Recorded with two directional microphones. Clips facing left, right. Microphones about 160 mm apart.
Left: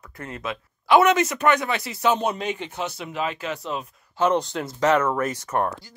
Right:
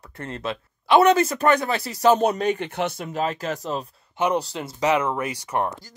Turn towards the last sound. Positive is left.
turn(degrees=-15)  # may be behind; listen again after turning